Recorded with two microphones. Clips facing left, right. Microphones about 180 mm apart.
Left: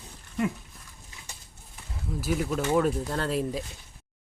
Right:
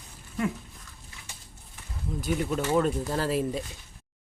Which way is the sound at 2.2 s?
5° left (ahead or behind).